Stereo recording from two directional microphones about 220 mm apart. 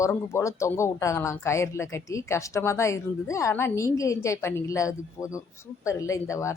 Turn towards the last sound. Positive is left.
turn(degrees=15)  # may be behind; listen again after turning